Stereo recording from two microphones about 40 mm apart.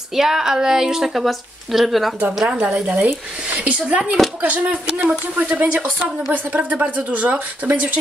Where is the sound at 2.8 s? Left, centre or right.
Right.